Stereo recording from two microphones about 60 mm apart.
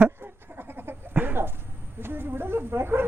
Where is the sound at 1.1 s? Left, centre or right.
Right.